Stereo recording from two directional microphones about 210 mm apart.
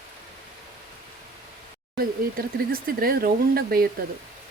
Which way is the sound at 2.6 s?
45° right (ahead or behind).